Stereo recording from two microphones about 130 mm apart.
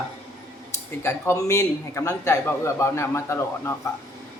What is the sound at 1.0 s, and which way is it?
A man's voice, 20° left (ahead or behind).